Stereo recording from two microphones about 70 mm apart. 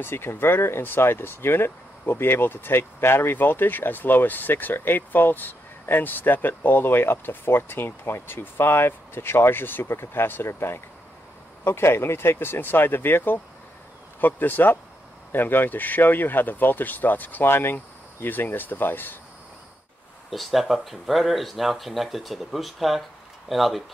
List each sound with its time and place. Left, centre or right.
0.0 s speech: left
20.2 s speech: centre